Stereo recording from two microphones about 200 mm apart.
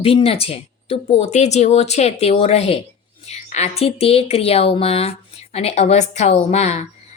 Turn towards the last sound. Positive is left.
turn(degrees=35)  # may be behind; listen again after turning